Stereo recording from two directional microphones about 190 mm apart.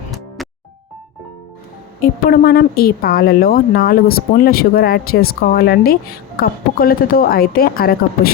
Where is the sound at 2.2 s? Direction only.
55° left (ahead or behind).